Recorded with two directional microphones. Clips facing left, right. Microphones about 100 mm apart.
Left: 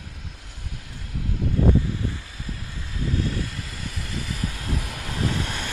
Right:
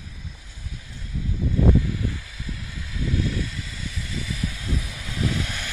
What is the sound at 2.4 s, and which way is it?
Vehicle, 40° left (ahead or behind).